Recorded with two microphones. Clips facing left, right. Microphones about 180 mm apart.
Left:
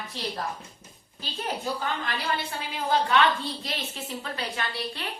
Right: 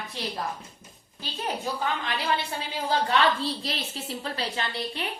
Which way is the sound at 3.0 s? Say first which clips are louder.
Even; 35° right (ahead or behind).